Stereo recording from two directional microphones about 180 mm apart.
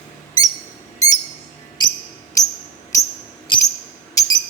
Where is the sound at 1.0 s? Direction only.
20° left (ahead or behind).